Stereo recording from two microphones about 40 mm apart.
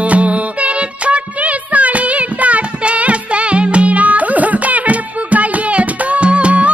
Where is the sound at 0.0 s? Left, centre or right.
Right.